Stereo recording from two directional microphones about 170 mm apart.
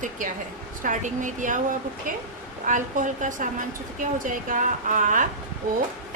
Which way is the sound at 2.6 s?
50° right (ahead or behind).